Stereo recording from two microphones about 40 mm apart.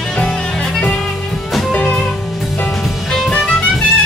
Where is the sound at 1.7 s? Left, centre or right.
Left.